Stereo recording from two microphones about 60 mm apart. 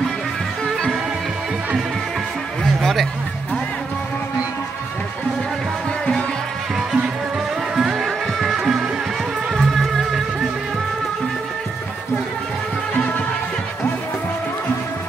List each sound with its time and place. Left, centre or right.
0.7 s music: centre
2.6 s music: centre
7.7 s music: centre
12.9 s music: left